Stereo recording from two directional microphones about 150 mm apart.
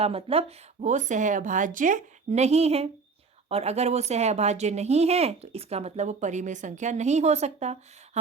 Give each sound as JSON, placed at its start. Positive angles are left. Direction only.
{"t": 0.0, "sound": "speech", "side_deg": -40}